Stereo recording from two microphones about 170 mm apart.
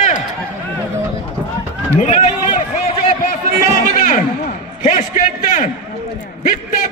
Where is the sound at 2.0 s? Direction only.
40° left (ahead or behind).